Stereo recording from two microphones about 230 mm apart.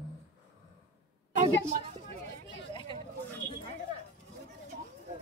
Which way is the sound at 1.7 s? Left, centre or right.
Right.